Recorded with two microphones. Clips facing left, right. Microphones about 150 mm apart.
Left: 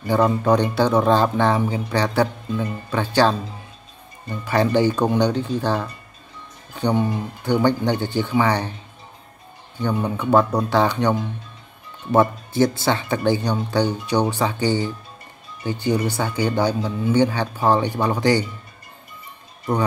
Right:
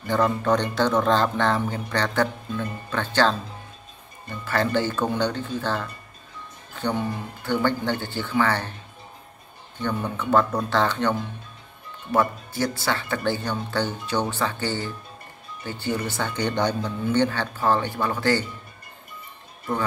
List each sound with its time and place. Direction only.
0.0 s speech: 10° left (ahead or behind)
9.8 s speech: 10° left (ahead or behind)
12.1 s speech: 25° left (ahead or behind)